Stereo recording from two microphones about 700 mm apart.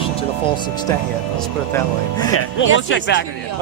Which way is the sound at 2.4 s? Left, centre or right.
Centre.